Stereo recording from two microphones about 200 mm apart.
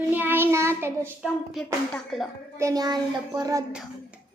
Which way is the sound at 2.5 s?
15° right (ahead or behind).